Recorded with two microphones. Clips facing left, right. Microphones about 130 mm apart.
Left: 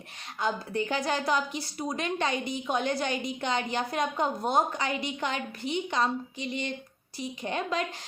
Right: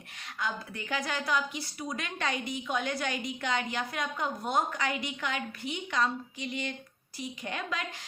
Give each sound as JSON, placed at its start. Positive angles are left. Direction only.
{"t": 0.3, "sound": "speech", "side_deg": 30}